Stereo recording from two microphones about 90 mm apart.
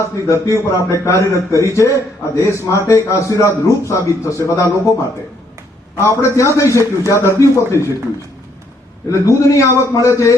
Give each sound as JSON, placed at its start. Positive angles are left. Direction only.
{"t": 0.0, "sound": "a man's voice", "side_deg": 35}
{"t": 6.0, "sound": "a man's voice", "side_deg": 35}
{"t": 9.0, "sound": "a man's voice", "side_deg": 35}